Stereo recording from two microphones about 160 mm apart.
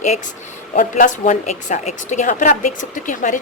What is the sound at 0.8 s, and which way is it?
A woman's voice, 55° left (ahead or behind).